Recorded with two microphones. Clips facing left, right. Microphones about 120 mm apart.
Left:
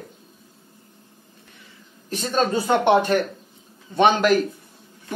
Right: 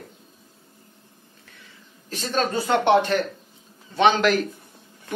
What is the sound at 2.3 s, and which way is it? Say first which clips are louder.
Speech: left 2 dB; 15° left (ahead or behind).